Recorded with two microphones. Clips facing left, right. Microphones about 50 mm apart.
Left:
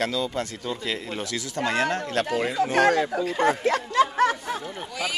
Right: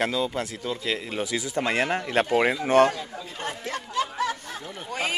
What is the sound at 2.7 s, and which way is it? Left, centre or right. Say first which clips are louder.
A man's voice: even; left.